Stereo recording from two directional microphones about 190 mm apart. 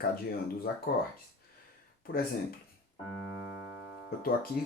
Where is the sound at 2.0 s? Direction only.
50° left (ahead or behind).